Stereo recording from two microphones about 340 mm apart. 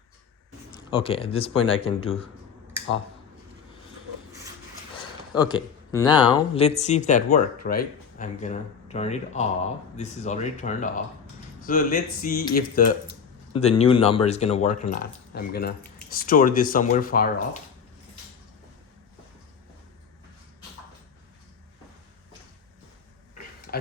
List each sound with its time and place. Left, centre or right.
0.7 s speech: centre
5.3 s speech: centre